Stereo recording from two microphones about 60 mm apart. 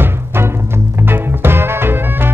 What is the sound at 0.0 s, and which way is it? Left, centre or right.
Music, right.